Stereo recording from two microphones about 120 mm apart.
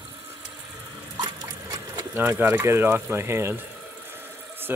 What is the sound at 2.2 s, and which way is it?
Speech, 20° right (ahead or behind).